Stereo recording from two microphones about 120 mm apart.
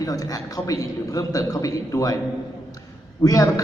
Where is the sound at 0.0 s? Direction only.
30° left (ahead or behind).